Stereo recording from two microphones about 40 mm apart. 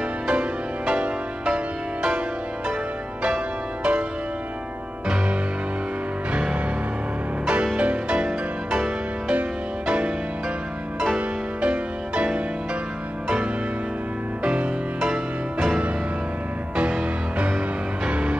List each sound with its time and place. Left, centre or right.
0.3 s music: right
7.7 s music: right
9.3 s music: right
11.1 s music: right
14.4 s music: right
18.1 s music: right